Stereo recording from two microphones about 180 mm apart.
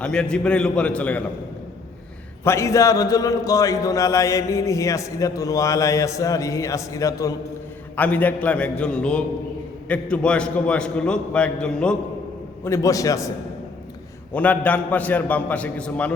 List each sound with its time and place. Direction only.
0.0 s a man's voice: 5° left (ahead or behind)
2.4 s a man's voice: 15° left (ahead or behind)
12.6 s a man's voice: 15° left (ahead or behind)
14.3 s a man's voice: 10° left (ahead or behind)